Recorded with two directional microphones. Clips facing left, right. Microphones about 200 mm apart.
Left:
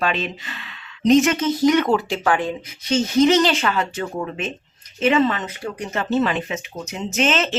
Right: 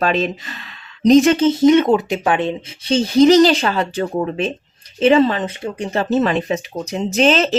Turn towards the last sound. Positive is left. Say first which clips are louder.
# right 6 dB
turn(degrees=-35)  # may be behind; listen again after turning